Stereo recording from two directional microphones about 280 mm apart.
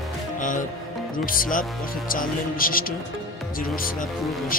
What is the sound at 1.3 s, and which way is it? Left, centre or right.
A man's voice, left.